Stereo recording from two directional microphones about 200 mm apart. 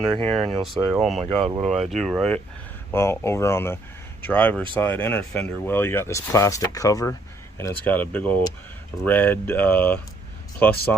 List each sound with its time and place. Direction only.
0.2 s speech: 25° right (ahead or behind)
0.6 s speech: centre (ahead or behind)
1.2 s speech: 30° right (ahead or behind)
1.9 s speech: centre (ahead or behind)